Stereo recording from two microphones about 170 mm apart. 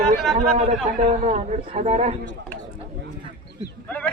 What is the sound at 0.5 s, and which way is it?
A man's voice, 40° right (ahead or behind).